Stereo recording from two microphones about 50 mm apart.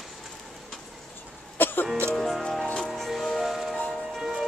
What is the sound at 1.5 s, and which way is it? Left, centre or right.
Music, left.